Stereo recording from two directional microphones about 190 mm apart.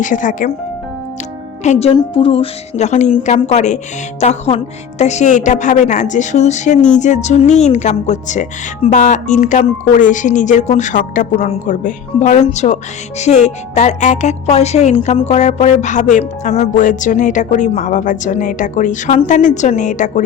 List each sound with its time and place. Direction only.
0.0 s speech: 45° left (ahead or behind)
1.6 s speech: 35° left (ahead or behind)